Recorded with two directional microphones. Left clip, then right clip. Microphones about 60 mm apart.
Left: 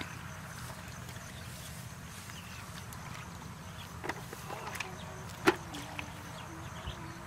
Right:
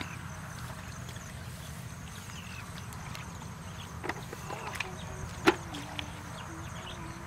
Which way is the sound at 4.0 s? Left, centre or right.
Centre.